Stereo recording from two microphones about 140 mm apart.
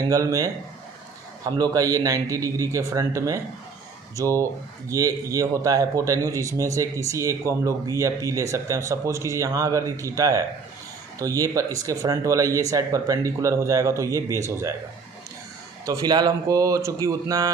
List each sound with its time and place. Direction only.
0.1 s a man's voice: 25° right (ahead or behind)
15.9 s a man's voice: 30° right (ahead or behind)